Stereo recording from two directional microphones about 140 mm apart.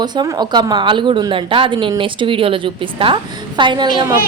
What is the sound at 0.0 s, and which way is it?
A woman's voice, 30° right (ahead or behind).